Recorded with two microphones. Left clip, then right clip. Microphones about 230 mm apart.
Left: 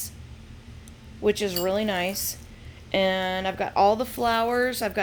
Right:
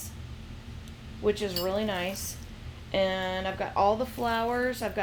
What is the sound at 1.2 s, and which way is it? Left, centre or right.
A woman's voice, left.